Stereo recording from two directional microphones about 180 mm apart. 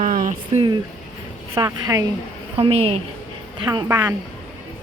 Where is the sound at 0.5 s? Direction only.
35° right (ahead or behind).